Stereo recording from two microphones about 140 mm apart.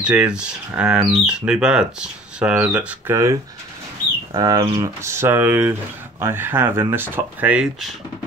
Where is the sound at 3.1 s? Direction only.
25° right (ahead or behind); by 8.0 s 5° right (ahead or behind).